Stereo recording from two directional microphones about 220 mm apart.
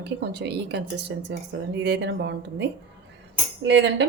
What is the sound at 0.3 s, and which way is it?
Speech, 50° right (ahead or behind).